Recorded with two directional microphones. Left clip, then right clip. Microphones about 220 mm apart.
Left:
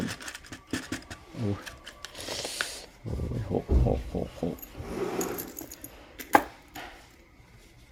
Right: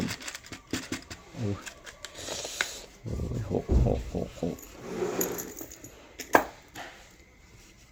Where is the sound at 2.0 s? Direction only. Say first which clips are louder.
Left 1 dB; 5° left (ahead or behind).